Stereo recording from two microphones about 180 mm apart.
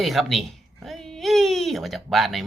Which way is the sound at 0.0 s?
Centre (ahead or behind).